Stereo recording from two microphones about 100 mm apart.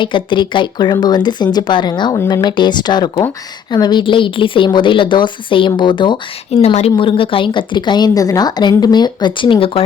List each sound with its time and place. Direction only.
0.0 s a woman's voice: 50° left (ahead or behind)
6.5 s a woman's voice: 90° left; by 9.8 s 65° left (ahead or behind)